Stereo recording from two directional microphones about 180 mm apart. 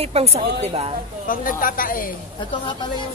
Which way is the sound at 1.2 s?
50° left (ahead or behind).